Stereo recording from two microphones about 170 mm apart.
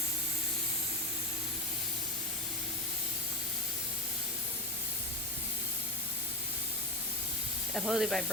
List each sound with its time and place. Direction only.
7.7 s speech: centre (ahead or behind)